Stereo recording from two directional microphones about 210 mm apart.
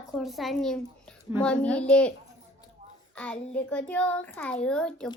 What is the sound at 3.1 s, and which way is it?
A child's voice, 5° left (ahead or behind).